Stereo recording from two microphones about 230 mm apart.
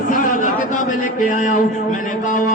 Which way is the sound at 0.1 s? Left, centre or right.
Left.